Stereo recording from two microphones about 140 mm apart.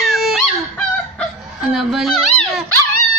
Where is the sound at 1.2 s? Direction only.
Centre (ahead or behind).